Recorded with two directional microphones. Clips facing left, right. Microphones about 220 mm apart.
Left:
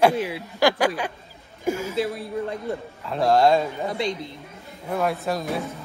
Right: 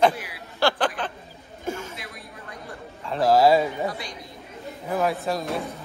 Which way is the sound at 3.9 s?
25° left (ahead or behind).